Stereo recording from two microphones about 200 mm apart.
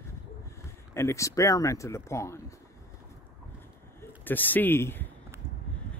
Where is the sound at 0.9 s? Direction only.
15° left (ahead or behind).